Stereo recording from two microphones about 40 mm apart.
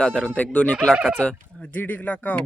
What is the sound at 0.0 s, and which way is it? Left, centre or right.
Speech, centre.